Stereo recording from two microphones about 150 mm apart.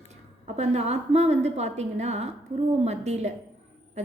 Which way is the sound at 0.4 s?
45° right (ahead or behind).